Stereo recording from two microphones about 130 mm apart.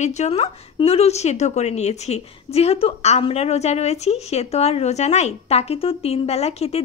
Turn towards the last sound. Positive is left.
turn(degrees=55)  # may be behind; listen again after turning